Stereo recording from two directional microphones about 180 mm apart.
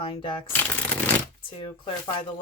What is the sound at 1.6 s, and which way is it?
Speech, 30° left (ahead or behind).